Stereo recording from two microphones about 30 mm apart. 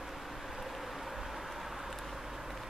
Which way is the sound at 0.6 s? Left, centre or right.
Centre.